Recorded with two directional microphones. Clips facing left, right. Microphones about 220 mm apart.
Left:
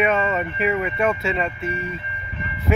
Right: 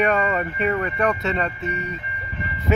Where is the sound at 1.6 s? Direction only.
40° right (ahead or behind).